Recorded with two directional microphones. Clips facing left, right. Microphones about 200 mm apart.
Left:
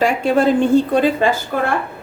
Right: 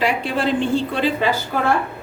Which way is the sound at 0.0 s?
45° left (ahead or behind).